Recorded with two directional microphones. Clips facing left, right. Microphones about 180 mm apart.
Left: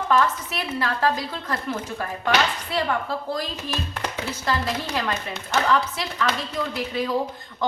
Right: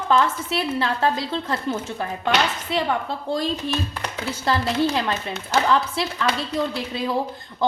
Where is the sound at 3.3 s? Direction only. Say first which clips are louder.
Right 5 dB; 25° right (ahead or behind).